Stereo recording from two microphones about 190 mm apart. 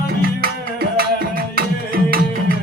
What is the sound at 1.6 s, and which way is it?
Music, 50° right (ahead or behind).